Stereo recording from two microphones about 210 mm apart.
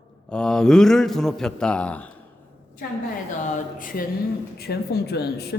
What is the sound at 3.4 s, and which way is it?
A woman's voice, 40° left (ahead or behind).